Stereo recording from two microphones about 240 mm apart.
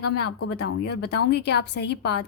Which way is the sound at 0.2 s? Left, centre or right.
Left.